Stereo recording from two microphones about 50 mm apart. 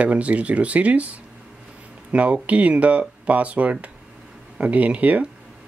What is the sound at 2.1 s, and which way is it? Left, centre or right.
Speech, right.